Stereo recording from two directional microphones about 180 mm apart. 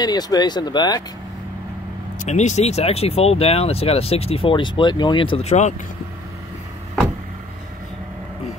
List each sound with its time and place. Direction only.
0.0 s speech: 20° left (ahead or behind)
2.2 s speech: 40° left (ahead or behind)